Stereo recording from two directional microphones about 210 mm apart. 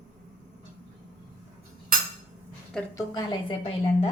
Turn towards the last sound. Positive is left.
turn(degrees=25)  # may be behind; listen again after turning